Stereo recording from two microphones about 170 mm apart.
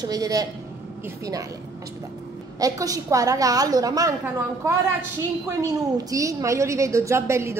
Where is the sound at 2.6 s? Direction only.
20° right (ahead or behind).